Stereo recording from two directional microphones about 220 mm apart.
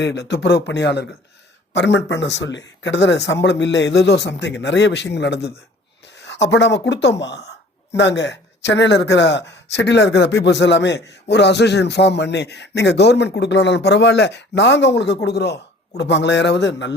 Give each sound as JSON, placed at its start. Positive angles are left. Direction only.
{"t": 0.0, "sound": "speech", "side_deg": 50}